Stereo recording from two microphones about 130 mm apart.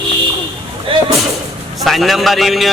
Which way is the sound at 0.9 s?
45° right (ahead or behind).